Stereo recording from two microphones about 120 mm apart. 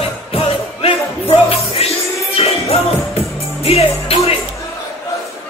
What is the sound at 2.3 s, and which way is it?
Music, 55° left (ahead or behind).